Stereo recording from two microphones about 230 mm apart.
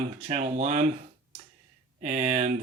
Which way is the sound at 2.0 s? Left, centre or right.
Right.